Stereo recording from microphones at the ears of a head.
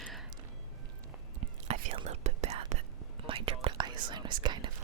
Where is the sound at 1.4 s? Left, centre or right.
Right.